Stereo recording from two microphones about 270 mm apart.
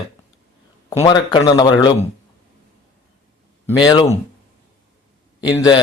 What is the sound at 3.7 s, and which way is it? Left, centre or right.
Speech, centre.